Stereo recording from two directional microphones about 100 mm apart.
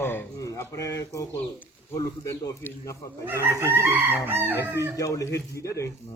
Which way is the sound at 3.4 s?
25° right (ahead or behind).